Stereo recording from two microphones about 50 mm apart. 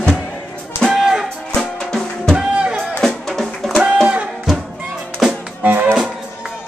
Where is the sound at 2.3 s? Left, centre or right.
Centre.